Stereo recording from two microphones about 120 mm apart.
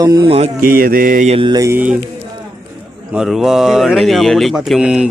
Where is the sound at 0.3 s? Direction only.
60° right (ahead or behind).